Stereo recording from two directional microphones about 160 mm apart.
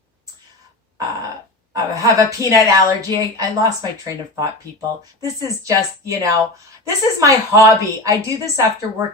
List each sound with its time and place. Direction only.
1.7 s a woman's voice: 20° right (ahead or behind)